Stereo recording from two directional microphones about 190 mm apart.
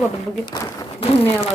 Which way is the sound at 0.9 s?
30° left (ahead or behind).